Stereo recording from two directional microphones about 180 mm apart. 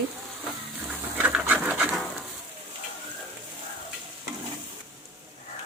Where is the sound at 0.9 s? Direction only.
5° right (ahead or behind).